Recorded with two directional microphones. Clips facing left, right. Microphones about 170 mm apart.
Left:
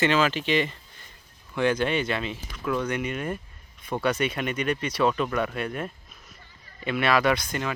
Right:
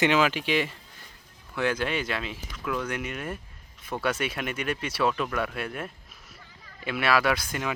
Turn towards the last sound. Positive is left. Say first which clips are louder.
# left 2 dB
turn(degrees=-5)  # may be behind; listen again after turning